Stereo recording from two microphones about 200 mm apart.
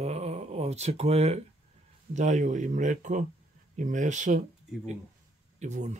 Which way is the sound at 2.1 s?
35° right (ahead or behind).